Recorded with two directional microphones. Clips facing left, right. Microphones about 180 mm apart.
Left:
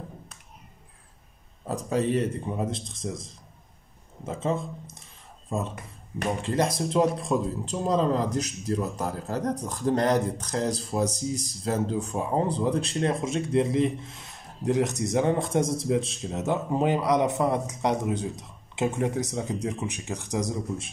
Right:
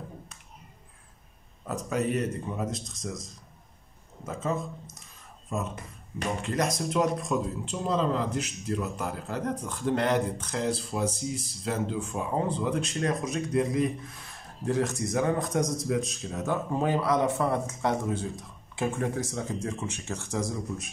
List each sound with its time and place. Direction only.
1.7 s a man's voice: 30° left (ahead or behind)
4.3 s a man's voice: 30° left (ahead or behind)